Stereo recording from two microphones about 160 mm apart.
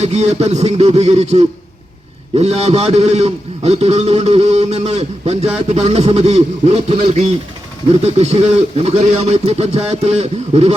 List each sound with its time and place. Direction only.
0.0 s a man's voice: 45° right (ahead or behind)